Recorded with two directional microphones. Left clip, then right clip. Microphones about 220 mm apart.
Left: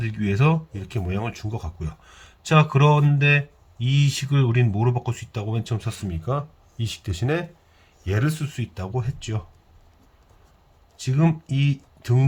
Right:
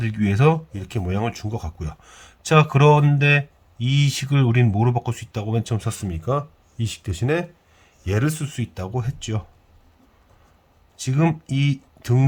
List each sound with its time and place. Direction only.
0.0 s speech: 25° right (ahead or behind)
10.9 s speech: 25° right (ahead or behind)